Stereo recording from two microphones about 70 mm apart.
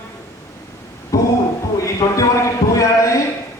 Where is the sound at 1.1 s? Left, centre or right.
Left.